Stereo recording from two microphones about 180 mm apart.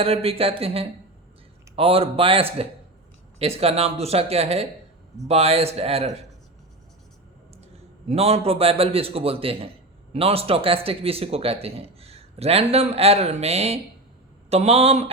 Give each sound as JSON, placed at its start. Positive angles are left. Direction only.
{"t": 0.0, "sound": "speech", "side_deg": -30}
{"t": 8.0, "sound": "speech", "side_deg": -35}